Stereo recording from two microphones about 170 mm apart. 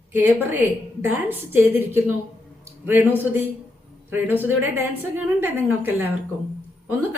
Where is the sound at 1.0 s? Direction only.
15° right (ahead or behind).